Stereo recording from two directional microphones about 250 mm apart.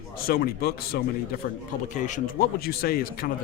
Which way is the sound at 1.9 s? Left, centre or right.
Left.